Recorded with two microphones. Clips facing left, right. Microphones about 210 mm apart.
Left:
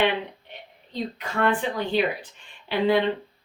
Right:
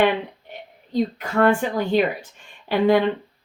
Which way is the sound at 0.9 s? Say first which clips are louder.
Right 7 dB; 45° right (ahead or behind).